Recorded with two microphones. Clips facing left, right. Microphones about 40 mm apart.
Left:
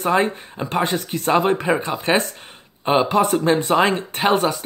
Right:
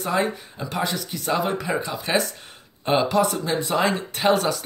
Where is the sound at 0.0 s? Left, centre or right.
Left.